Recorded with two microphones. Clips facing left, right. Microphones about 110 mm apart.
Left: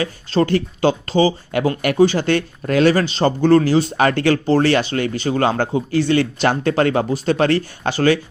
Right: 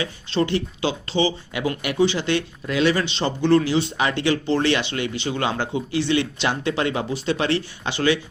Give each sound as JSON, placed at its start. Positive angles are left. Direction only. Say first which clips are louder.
{"t": 0.0, "sound": "speech", "louder": "left 5 dB", "side_deg": 45}